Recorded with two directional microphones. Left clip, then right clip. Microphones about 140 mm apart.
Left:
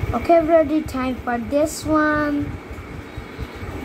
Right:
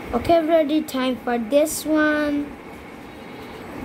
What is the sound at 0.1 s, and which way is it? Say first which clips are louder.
A woman's voice: left 2 dB; 25° right (ahead or behind).